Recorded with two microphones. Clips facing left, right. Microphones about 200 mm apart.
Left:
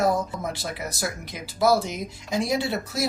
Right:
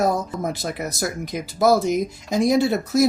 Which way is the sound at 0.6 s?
45° right (ahead or behind).